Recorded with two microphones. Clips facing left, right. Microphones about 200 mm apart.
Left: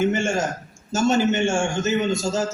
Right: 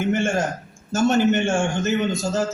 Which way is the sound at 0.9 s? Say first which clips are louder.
Right 1 dB; 60° right (ahead or behind).